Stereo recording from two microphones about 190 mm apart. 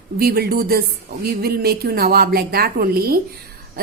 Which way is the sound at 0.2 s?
55° right (ahead or behind).